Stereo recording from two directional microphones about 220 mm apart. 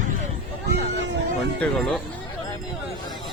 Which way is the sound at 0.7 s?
50° right (ahead or behind).